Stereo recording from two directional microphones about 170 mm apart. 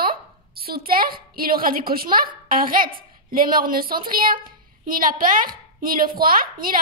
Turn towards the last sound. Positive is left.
turn(degrees=-55)  # may be behind; listen again after turning